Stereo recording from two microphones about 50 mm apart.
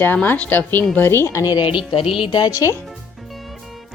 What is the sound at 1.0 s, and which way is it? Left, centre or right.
Speech, left.